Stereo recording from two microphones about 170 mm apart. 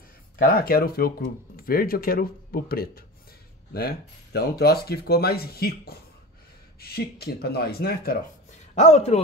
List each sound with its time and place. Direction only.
0.4 s speech: 60° left (ahead or behind)
8.7 s speech: 40° left (ahead or behind)